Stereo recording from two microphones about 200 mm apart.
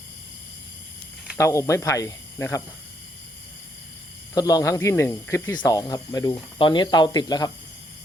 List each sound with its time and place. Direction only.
1.4 s speech: 15° left (ahead or behind)
4.4 s speech: 20° left (ahead or behind)